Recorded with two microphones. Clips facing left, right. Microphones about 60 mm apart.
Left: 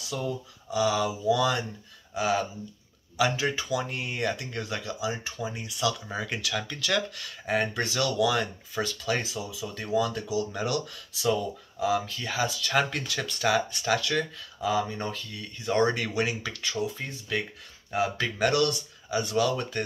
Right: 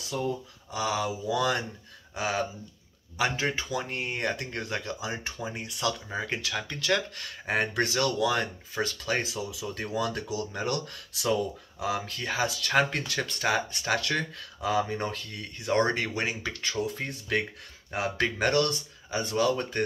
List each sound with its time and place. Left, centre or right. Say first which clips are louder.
0.1 s speech: right 1 dB; right
7.9 s speech: left 4 dB; right
17.9 s speech: left 1 dB; right